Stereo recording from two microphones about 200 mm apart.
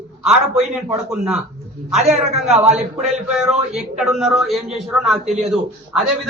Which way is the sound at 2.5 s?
35° right (ahead or behind).